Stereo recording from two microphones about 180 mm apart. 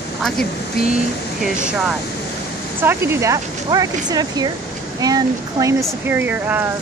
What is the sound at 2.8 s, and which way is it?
Speech, 15° right (ahead or behind).